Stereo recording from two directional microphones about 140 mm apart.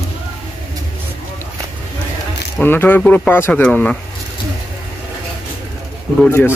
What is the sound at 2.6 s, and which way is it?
Speech, 15° left (ahead or behind).